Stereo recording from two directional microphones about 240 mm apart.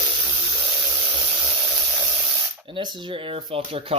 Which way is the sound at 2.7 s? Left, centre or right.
Centre.